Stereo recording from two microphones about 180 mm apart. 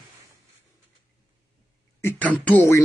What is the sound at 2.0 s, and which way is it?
Speech, 10° left (ahead or behind).